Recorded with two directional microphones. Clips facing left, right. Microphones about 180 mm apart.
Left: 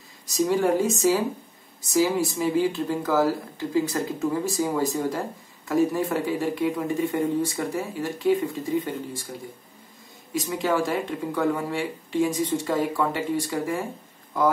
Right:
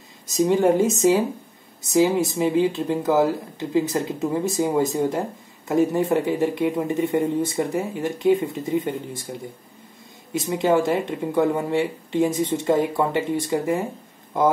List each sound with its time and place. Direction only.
0.3 s speech: 20° right (ahead or behind)
10.5 s speech: 25° right (ahead or behind)